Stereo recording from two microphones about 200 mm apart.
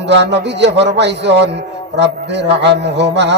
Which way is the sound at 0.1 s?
60° right (ahead or behind).